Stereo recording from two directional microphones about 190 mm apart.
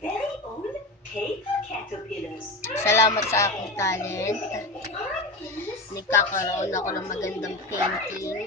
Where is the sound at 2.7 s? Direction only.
15° left (ahead or behind).